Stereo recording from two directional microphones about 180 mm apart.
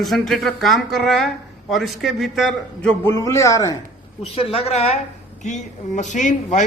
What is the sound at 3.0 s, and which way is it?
Speech, 15° left (ahead or behind).